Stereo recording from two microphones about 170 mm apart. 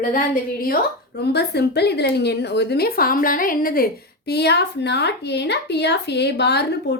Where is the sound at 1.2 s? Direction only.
75° left (ahead or behind); by 3.8 s 60° left (ahead or behind).